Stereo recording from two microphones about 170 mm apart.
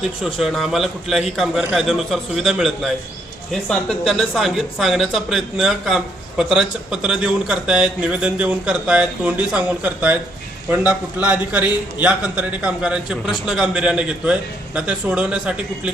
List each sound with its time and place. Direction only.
0.3 s speech: centre (ahead or behind)